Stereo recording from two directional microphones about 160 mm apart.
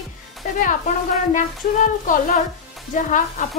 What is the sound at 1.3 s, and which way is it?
A woman's voice, 55° left (ahead or behind).